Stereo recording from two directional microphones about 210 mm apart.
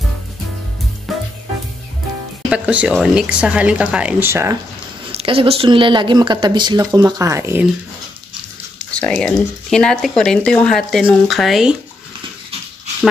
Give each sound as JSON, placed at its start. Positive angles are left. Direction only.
{"t": 1.1, "sound": "music", "side_deg": 0}
{"t": 2.5, "sound": "speech", "side_deg": -5}
{"t": 5.1, "sound": "speech", "side_deg": -25}
{"t": 8.9, "sound": "speech", "side_deg": 5}